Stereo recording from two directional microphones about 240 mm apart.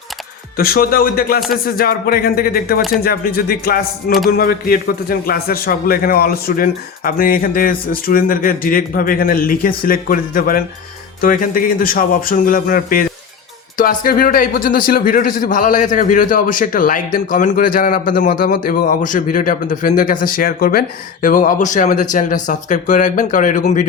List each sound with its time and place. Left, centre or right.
0.5 s speech: left